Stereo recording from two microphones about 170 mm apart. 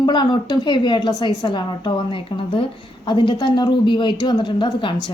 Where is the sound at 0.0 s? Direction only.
25° left (ahead or behind).